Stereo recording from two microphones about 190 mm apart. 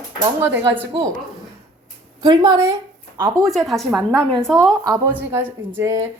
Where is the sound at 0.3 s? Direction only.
10° right (ahead or behind).